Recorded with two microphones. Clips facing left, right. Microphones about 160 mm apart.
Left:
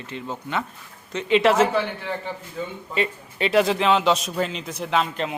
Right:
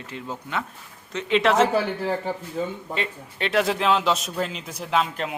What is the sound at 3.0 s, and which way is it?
A man's voice, 5° left (ahead or behind).